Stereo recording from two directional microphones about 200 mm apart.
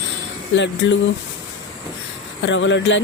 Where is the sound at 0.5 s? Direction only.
65° left (ahead or behind).